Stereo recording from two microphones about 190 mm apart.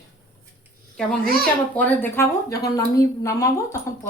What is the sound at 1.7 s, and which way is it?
A woman's voice, 10° left (ahead or behind).